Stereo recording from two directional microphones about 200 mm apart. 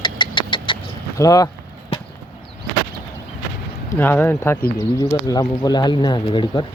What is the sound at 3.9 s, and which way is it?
Speech, 10° left (ahead or behind).